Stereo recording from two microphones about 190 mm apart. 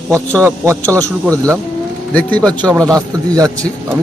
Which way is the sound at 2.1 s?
5° left (ahead or behind).